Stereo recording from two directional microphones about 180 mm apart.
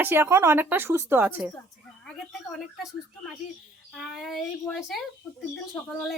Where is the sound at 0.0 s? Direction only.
15° right (ahead or behind).